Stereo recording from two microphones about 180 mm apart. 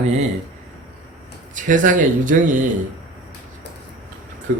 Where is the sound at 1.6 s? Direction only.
45° right (ahead or behind).